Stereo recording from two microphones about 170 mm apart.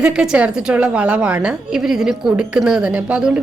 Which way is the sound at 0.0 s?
5° right (ahead or behind).